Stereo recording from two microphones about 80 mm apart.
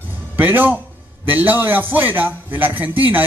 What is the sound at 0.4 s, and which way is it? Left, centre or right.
Speech, right.